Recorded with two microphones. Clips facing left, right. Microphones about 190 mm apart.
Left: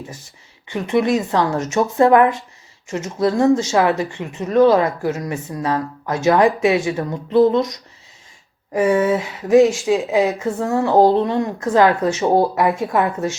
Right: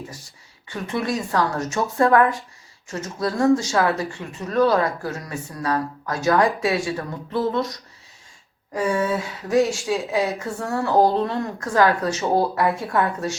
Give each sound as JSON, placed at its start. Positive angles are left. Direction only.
{"t": 0.7, "sound": "speech", "side_deg": 20}